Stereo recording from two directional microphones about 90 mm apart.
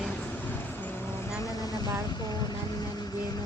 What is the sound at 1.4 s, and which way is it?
Vehicle, 45° left (ahead or behind).